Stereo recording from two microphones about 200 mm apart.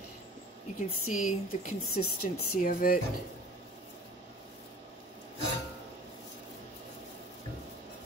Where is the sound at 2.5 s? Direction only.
45° left (ahead or behind).